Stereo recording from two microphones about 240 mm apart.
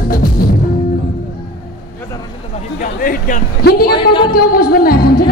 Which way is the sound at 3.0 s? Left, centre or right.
Left.